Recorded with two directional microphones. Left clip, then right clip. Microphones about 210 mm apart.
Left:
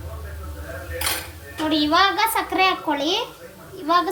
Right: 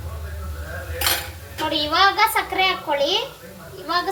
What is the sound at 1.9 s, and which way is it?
A woman's voice, 35° left (ahead or behind).